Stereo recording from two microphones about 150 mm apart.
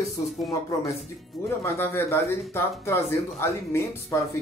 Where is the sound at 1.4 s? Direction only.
15° left (ahead or behind).